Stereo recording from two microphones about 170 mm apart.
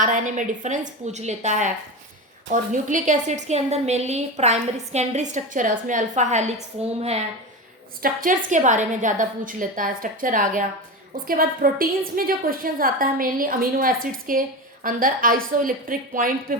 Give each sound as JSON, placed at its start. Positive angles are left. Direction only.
{"t": 0.0, "sound": "a woman's voice", "side_deg": -45}
{"t": 8.0, "sound": "a woman's voice", "side_deg": -55}